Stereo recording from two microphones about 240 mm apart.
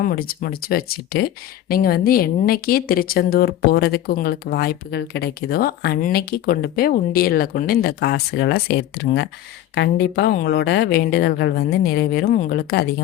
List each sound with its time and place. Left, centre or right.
0.0 s speech: left